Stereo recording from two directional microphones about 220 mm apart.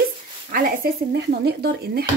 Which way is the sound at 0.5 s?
40° right (ahead or behind).